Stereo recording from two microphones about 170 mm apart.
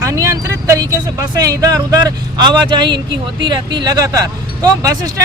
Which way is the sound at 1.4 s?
20° right (ahead or behind).